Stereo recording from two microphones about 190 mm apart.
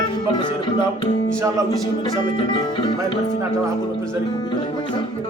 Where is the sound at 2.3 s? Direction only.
25° left (ahead or behind).